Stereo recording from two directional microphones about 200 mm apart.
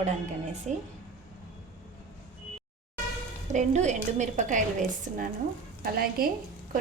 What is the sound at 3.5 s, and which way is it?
A woman's voice, 35° right (ahead or behind).